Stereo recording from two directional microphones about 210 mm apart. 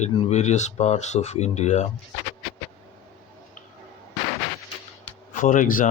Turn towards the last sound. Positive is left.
turn(degrees=40)  # may be behind; listen again after turning